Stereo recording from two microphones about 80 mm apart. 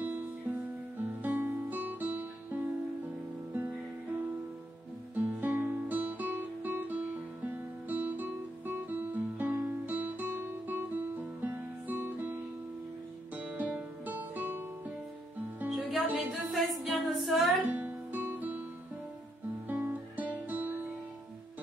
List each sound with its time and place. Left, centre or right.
0.0 s music: right
15.9 s music: centre
17.6 s guitar: right
19.7 s music: right